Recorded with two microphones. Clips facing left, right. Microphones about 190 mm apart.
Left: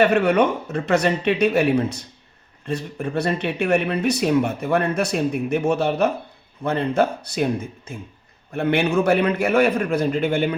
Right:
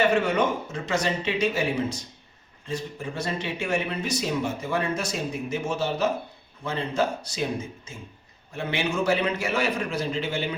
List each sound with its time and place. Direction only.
0.0 s speech: 60° left (ahead or behind)